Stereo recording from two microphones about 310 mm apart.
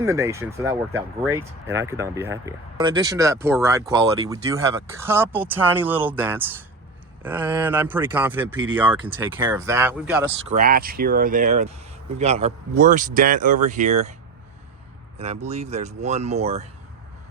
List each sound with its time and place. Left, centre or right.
0.0 s speech: centre
10.5 s speech: right
15.4 s speech: right